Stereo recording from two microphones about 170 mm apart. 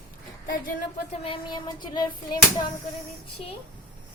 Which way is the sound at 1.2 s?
30° left (ahead or behind).